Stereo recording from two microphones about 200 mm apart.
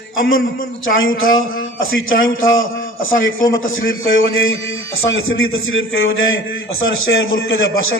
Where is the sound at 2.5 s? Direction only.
80° left.